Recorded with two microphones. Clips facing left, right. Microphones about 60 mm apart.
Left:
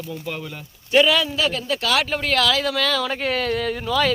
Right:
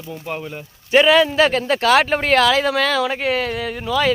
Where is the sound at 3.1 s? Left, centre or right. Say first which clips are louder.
Right 2 dB; centre.